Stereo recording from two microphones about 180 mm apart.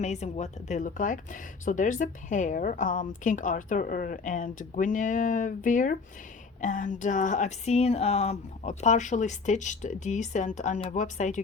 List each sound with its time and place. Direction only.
0.0 s speech: 40° left (ahead or behind)